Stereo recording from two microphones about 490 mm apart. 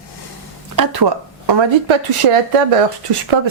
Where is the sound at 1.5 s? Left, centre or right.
Right.